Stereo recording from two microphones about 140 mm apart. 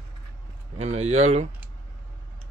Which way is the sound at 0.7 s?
50° right (ahead or behind).